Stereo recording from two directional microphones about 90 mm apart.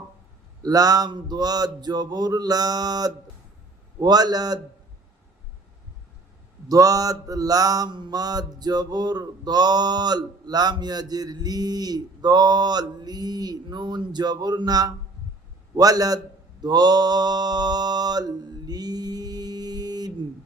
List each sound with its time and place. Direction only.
0.6 s mantra: 45° right (ahead or behind)
6.7 s mantra: 40° right (ahead or behind)
15.7 s speech: 40° right (ahead or behind)